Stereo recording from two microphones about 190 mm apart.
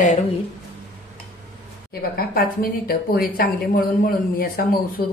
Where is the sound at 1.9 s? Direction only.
50° left (ahead or behind).